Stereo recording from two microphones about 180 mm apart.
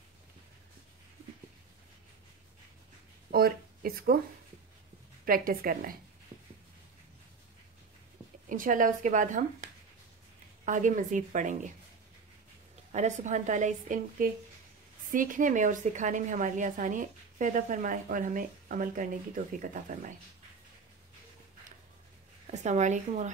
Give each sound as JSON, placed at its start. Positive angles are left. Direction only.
{"t": 3.3, "sound": "a sound", "side_deg": -55}
{"t": 5.2, "sound": "a woman's voice", "side_deg": -55}
{"t": 8.5, "sound": "a woman's voice", "side_deg": -50}
{"t": 12.9, "sound": "a woman's voice", "side_deg": -40}
{"t": 22.5, "sound": "speech", "side_deg": -40}